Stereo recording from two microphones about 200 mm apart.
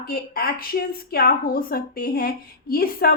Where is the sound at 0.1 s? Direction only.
50° left (ahead or behind).